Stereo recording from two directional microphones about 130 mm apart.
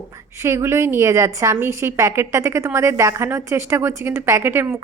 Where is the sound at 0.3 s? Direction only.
20° right (ahead or behind).